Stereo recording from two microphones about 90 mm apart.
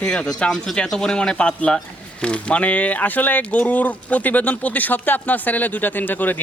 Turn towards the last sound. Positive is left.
turn(degrees=20)  # may be behind; listen again after turning